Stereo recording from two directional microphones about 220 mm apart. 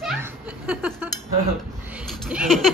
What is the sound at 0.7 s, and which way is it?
Cutlery, 5° right (ahead or behind).